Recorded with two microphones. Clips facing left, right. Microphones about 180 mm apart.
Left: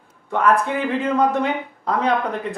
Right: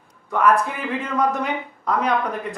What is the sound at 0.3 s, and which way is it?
Speech, 30° left (ahead or behind).